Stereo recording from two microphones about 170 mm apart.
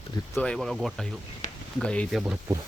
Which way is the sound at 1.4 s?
45° left (ahead or behind).